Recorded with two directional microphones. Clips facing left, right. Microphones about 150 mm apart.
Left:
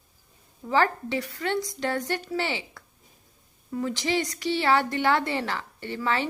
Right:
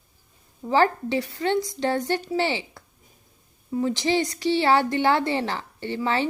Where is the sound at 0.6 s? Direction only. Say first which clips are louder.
Right 3 dB; 30° right (ahead or behind).